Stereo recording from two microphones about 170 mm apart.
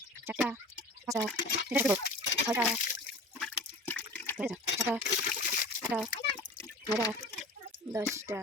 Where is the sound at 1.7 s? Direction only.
10° right (ahead or behind).